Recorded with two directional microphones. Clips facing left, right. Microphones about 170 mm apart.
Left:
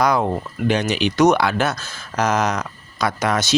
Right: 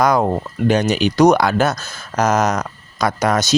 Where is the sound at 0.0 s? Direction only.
45° right (ahead or behind).